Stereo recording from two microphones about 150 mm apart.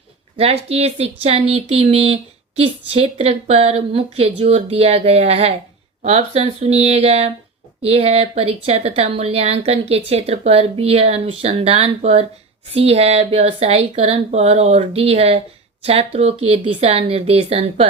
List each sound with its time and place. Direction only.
0.3 s a woman's voice: 40° right (ahead or behind)